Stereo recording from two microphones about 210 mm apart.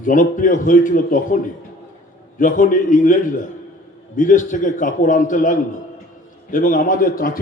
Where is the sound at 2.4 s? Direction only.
40° left (ahead or behind).